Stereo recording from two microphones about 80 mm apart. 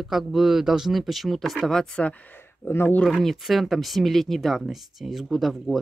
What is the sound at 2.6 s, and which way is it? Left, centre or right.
Speech, left.